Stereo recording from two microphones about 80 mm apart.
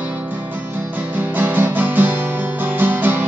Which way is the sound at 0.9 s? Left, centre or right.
Right.